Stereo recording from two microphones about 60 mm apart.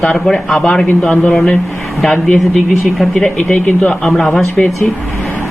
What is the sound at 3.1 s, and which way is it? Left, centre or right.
Speech, centre.